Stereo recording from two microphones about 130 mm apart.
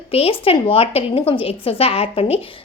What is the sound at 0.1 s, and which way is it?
Speech, 45° left (ahead or behind).